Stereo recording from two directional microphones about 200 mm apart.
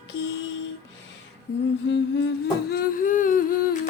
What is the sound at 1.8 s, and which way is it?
Humming, 60° left (ahead or behind).